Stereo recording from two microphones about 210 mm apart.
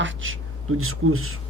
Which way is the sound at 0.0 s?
70° right (ahead or behind).